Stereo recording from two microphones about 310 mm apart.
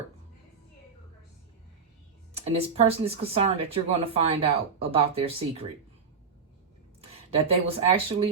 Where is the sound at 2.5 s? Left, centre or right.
Centre.